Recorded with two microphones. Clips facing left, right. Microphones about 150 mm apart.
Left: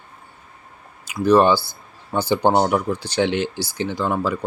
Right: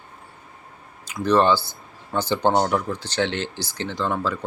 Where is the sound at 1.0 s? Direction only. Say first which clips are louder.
Left 4 dB; 10° left (ahead or behind).